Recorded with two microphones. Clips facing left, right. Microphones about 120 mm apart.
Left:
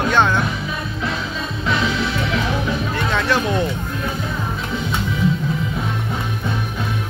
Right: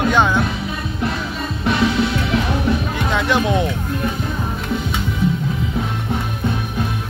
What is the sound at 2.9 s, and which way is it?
Music, 15° right (ahead or behind).